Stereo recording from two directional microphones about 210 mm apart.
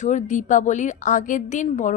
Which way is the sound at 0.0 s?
35° left (ahead or behind).